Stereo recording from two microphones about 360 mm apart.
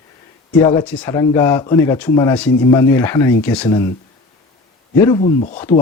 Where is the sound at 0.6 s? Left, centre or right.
Centre.